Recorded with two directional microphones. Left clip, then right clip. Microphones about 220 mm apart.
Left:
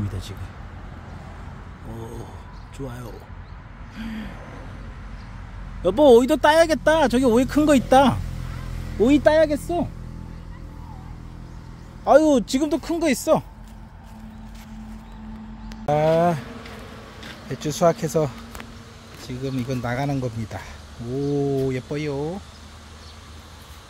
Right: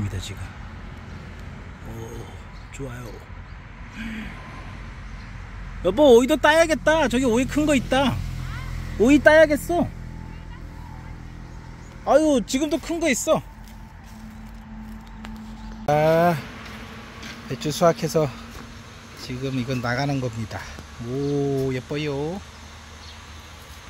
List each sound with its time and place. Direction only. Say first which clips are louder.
2.0 s speech: left 1 dB; 15° left (ahead or behind)
5.8 s speech: left 1 dB; 5° left (ahead or behind); by 8.2 s 20° left (ahead or behind)
9.0 s speech: right 2 dB; 10° right (ahead or behind)
12.0 s speech: left 3 dB; 15° left (ahead or behind)
15.8 s speech: right 1 dB; centre (ahead or behind)
17.5 s speech: even; 5° left (ahead or behind)